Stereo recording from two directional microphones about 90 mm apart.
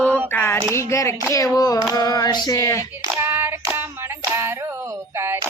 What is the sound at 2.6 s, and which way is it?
Speech, 35° left (ahead or behind).